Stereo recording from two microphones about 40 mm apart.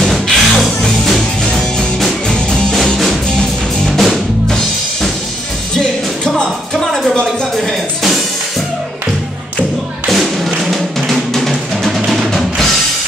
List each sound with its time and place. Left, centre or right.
0.0 s music: centre
3.3 s music: centre
5.8 s music: centre
6.8 s a sound: centre
7.5 s music: centre
10.0 s music: centre
11.1 s music: centre
12.3 s drum kit: centre